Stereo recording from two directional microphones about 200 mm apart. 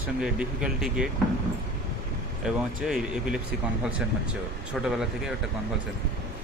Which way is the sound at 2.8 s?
5° right (ahead or behind).